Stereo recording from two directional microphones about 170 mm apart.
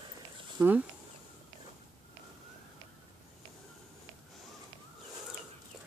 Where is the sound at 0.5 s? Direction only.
10° right (ahead or behind).